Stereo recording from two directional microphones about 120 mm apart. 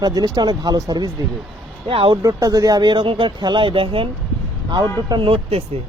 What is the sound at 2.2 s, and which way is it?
Speech, 30° right (ahead or behind).